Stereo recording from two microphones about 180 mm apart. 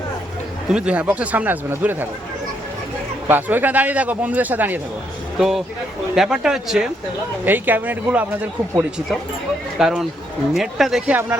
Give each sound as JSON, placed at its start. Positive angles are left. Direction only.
{"t": 0.7, "sound": "a man's voice", "side_deg": -5}
{"t": 3.2, "sound": "a man's voice", "side_deg": -10}
{"t": 9.7, "sound": "speech", "side_deg": 0}